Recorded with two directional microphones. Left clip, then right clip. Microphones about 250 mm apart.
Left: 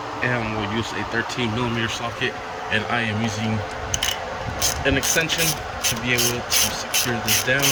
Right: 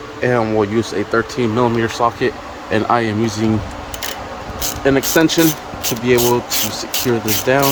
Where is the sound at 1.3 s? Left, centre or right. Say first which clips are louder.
Right 8 dB; centre.